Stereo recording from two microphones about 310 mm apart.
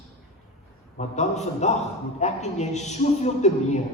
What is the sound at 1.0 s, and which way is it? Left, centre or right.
A man's voice, left.